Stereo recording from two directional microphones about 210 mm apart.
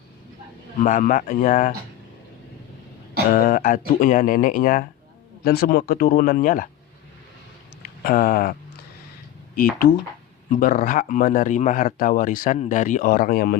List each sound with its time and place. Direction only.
0.8 s speech: 40° left (ahead or behind)
3.3 s speech: 40° left (ahead or behind)
7.8 s a sound: 45° left (ahead or behind)
9.6 s speech: 45° left (ahead or behind)